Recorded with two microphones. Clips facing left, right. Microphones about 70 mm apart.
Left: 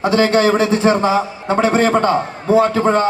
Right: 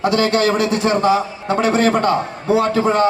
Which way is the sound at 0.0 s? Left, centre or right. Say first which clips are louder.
Left 2 dB; left.